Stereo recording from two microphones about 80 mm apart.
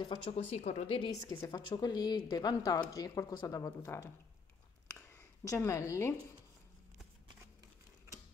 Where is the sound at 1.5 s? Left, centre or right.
Left.